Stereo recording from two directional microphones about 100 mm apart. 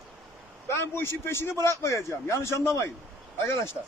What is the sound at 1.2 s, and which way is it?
Speech, 25° left (ahead or behind).